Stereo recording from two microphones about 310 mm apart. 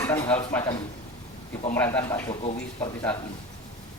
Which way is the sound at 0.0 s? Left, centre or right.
Centre.